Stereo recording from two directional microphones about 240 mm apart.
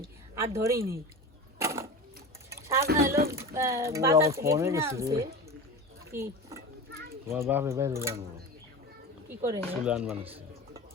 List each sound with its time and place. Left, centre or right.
0.3 s speech: centre
1.5 s a sound: centre
2.8 s speech: right
3.3 s speech: centre
6.1 s a sound: centre
7.3 s speech: centre
9.4 s speech: centre
10.2 s speech: right